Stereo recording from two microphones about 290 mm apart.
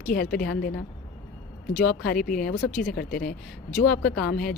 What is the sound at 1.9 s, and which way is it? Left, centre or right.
Speech, left.